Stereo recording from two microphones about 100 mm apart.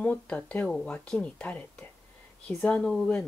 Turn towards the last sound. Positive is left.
turn(degrees=10)  # may be behind; listen again after turning